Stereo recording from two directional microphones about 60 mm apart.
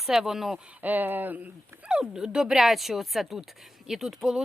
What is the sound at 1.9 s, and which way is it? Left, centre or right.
Speech, centre.